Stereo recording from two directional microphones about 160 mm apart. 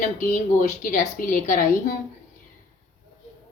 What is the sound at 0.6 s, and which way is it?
Speech, 50° left (ahead or behind).